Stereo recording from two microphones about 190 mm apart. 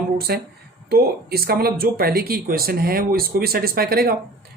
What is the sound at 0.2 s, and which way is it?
Speech, 55° right (ahead or behind).